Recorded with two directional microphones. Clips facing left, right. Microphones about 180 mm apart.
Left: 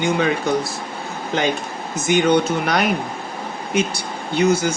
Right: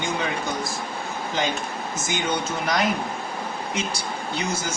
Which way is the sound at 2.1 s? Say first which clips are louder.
Left 11 dB; 65° left (ahead or behind).